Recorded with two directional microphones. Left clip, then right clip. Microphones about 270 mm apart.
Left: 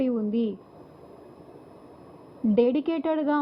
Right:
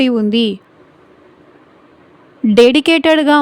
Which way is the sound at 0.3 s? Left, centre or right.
Right.